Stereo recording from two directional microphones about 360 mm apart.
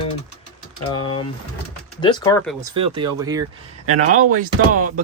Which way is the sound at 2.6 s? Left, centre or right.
Centre.